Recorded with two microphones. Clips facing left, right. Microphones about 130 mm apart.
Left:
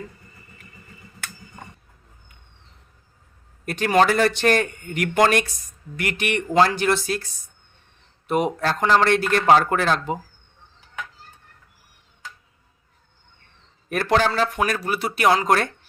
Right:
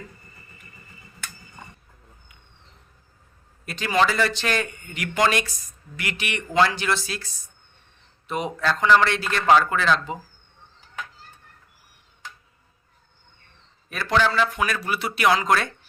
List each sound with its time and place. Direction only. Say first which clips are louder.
3.7 s speech: left 4 dB; 55° left (ahead or behind)
8.3 s speech: left 4 dB; 55° left (ahead or behind)
13.9 s speech: left 2 dB; 45° left (ahead or behind)